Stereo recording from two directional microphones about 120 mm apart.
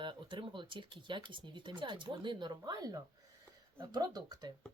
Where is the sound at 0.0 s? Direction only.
40° right (ahead or behind).